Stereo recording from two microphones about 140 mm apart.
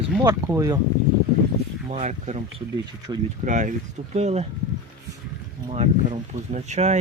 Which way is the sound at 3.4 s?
65° right (ahead or behind).